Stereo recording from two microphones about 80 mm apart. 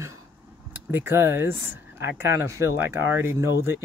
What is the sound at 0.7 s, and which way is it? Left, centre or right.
Speech, right.